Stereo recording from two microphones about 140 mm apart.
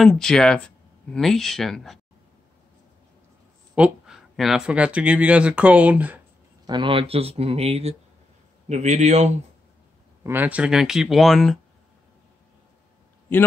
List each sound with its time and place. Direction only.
0.0 s speech: 5° left (ahead or behind)
3.7 s speech: 5° right (ahead or behind)
6.6 s a man's voice: 35° right (ahead or behind); by 9.3 s 55° right (ahead or behind)
10.2 s speech: 15° right (ahead or behind)